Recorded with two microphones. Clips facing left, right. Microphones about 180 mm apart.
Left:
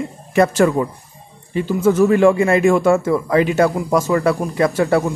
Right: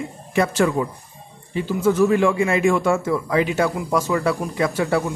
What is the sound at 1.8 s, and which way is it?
A man's voice, 45° left (ahead or behind).